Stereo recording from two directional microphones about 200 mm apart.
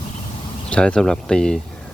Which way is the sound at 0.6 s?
5° left (ahead or behind).